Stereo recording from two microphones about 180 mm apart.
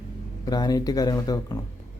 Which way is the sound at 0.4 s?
20° left (ahead or behind).